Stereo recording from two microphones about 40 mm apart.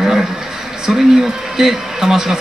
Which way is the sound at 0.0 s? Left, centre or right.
Centre.